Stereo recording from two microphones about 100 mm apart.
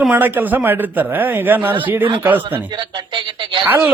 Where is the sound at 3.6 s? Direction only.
20° right (ahead or behind).